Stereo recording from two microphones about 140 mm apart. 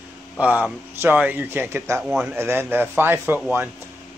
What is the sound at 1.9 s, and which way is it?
Speech, centre (ahead or behind).